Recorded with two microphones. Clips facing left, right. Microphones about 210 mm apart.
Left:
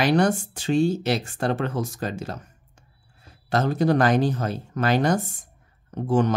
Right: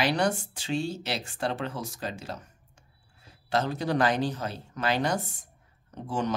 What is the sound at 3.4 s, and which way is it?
Speech, 50° left (ahead or behind).